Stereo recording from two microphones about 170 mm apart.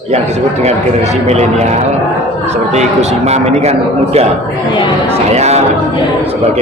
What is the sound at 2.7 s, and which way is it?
A man's voice, 40° right (ahead or behind).